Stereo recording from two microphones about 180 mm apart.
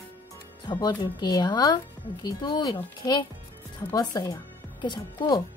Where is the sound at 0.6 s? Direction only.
25° left (ahead or behind).